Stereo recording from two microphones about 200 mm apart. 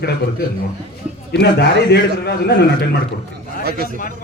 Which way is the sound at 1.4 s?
55° left (ahead or behind).